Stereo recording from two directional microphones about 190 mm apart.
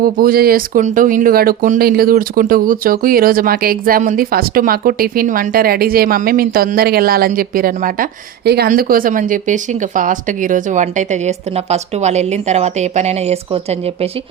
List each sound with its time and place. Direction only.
0.0 s speech: 50° right (ahead or behind); by 14.1 s 30° right (ahead or behind)